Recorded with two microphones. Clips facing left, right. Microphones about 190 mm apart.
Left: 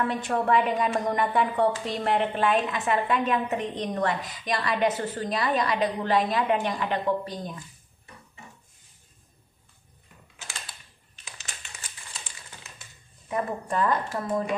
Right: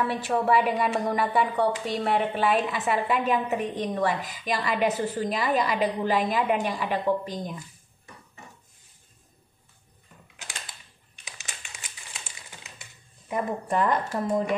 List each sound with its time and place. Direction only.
0.0 s a woman's voice: 5° right (ahead or behind)
11.4 s crumpling: 15° right (ahead or behind)
13.3 s speech: 20° right (ahead or behind)